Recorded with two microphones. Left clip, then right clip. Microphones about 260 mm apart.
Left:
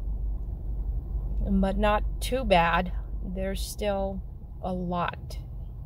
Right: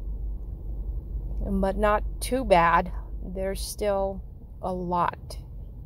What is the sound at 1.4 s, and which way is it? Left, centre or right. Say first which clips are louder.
Speech: right 2 dB; right.